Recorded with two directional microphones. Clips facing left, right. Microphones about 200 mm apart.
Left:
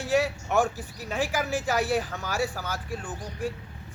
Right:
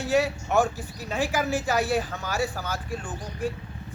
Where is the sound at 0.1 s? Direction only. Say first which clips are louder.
Right 1 dB; 10° left (ahead or behind).